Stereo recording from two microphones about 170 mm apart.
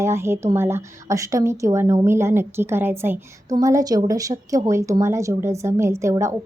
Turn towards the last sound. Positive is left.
turn(degrees=-15)  # may be behind; listen again after turning